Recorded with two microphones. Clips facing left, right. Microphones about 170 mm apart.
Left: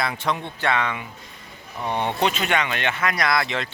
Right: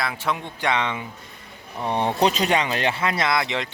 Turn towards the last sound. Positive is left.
turn(degrees=-20)  # may be behind; listen again after turning